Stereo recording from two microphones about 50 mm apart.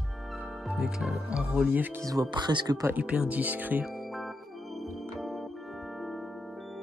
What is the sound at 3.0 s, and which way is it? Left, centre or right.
Speech, right.